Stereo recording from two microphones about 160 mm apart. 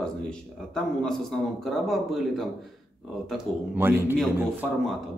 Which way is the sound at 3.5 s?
5° left (ahead or behind).